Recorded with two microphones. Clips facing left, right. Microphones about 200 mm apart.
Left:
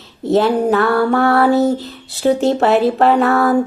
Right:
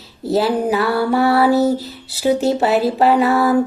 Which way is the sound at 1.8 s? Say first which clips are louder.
Left 2 dB; centre (ahead or behind).